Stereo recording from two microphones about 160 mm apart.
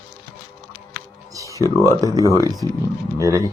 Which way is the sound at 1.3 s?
20° right (ahead or behind).